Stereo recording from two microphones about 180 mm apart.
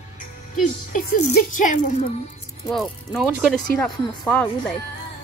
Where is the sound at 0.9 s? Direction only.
50° left (ahead or behind).